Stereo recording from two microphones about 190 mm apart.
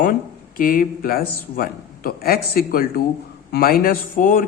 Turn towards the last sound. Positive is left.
turn(degrees=45)  # may be behind; listen again after turning